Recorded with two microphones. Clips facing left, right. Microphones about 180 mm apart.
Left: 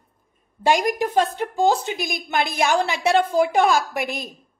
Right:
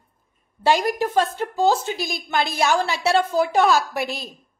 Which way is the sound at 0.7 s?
15° left (ahead or behind).